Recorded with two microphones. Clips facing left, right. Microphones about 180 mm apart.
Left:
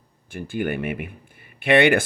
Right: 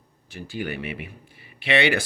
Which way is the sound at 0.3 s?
50° left (ahead or behind).